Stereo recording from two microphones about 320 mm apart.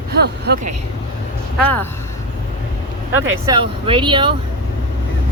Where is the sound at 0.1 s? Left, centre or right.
Right.